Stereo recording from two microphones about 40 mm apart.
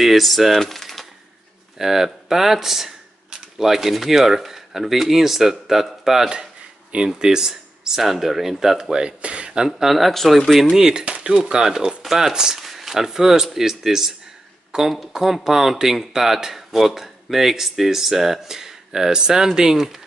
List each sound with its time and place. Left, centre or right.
0.0 s speech: centre
1.8 s speech: centre
3.3 s speech: centre
8.9 s speech: right
9.7 s speech: centre
10.9 s speech: centre
11.6 s speech: centre